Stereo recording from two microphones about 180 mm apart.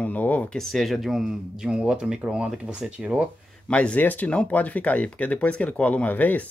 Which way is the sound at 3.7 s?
5° left (ahead or behind).